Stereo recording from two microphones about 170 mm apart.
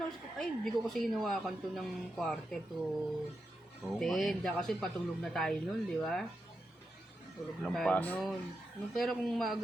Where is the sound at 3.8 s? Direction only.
Centre (ahead or behind).